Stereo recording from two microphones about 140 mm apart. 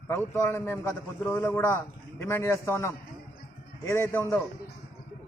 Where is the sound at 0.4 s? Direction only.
15° left (ahead or behind).